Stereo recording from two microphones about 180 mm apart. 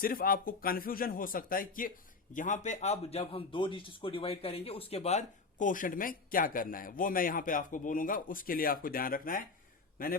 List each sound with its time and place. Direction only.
0.0 s a man's voice: 55° left (ahead or behind)